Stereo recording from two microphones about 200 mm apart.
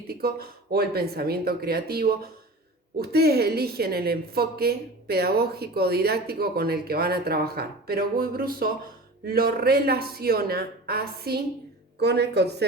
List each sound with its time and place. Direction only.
0.1 s a woman's voice: 50° right (ahead or behind)